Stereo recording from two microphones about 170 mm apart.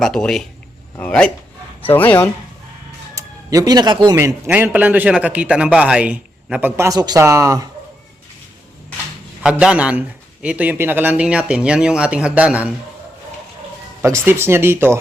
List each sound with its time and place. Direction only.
0.0 s a man's voice: centre (ahead or behind)
3.2 s speech: 20° right (ahead or behind)
4.1 s a man's voice: 15° right (ahead or behind)
9.4 s a man's voice: 5° right (ahead or behind)
14.0 s a man's voice: 15° right (ahead or behind)